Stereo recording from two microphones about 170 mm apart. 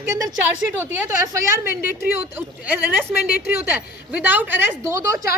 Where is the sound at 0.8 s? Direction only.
15° right (ahead or behind).